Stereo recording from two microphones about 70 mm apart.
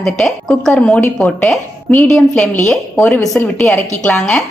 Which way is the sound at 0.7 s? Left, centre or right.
Centre.